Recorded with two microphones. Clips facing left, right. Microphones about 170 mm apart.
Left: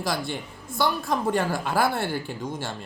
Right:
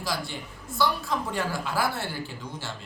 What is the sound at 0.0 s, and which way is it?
A woman's voice, 55° left (ahead or behind).